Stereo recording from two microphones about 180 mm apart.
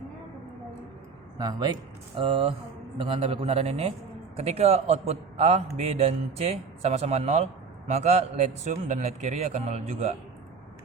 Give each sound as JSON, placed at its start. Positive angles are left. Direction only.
{"t": 1.4, "sound": "a man's voice", "side_deg": -20}